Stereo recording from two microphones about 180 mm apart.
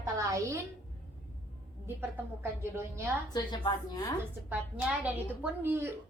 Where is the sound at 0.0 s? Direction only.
15° right (ahead or behind).